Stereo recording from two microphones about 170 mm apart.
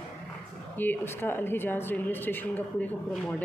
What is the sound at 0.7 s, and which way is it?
A woman's voice, 10° left (ahead or behind).